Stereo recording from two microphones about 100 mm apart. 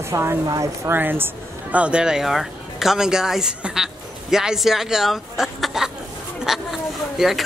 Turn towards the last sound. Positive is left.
turn(degrees=0)  # may be behind; listen again after turning